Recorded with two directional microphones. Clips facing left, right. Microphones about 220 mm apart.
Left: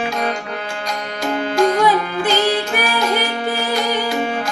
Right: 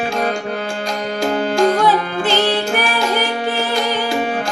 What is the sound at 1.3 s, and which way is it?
Music, 35° right (ahead or behind).